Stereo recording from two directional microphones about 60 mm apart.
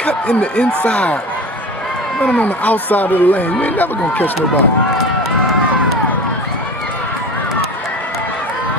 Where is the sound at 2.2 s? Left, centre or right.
Left.